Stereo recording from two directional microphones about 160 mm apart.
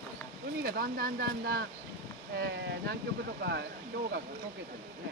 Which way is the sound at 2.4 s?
85° right.